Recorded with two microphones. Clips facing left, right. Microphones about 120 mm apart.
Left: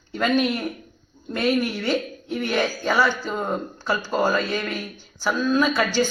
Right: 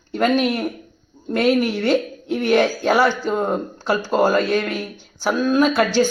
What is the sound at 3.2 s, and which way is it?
Speech, 20° right (ahead or behind).